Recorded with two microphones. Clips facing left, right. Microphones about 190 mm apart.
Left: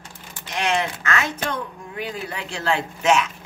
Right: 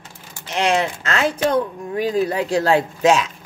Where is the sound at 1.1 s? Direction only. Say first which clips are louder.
Right 9 dB; 35° right (ahead or behind).